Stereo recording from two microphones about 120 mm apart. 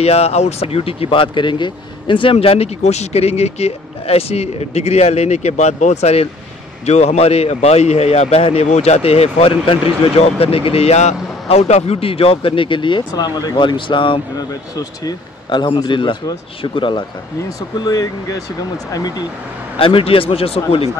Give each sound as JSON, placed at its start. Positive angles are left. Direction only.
{"t": 0.0, "sound": "a man's voice", "side_deg": 60}
{"t": 2.3, "sound": "a man's voice", "side_deg": 55}
{"t": 17.7, "sound": "speech", "side_deg": 35}
{"t": 19.8, "sound": "a man's voice", "side_deg": 50}